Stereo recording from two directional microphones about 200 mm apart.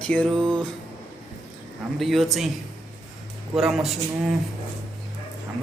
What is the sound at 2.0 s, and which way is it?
Speech, centre (ahead or behind).